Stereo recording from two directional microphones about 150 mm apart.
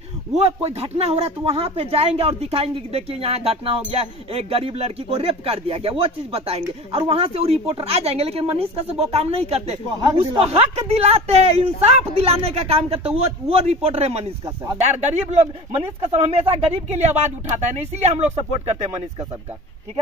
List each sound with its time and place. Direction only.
0.3 s speech: 45° right (ahead or behind)
9.9 s speech: 25° right (ahead or behind)
10.4 s speech: 40° right (ahead or behind)
15.3 s speech: 45° right (ahead or behind)